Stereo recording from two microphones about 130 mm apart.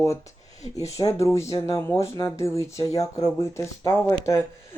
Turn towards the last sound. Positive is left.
turn(degrees=20)  # may be behind; listen again after turning